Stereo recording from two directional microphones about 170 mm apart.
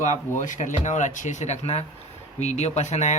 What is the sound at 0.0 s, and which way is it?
Speech, 45° left (ahead or behind).